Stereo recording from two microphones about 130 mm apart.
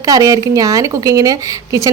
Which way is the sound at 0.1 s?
25° right (ahead or behind).